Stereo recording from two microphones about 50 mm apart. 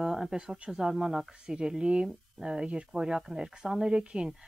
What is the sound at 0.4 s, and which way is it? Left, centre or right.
Speech, centre.